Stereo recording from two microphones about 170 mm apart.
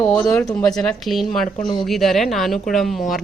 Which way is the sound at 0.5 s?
5° left (ahead or behind).